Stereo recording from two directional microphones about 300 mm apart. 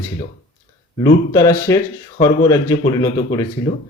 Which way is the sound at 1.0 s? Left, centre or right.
Centre.